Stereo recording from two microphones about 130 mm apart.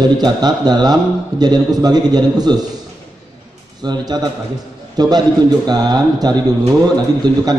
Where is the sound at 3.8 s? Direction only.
30° right (ahead or behind).